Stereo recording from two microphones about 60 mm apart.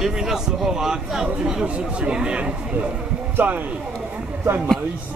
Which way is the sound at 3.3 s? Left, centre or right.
Right.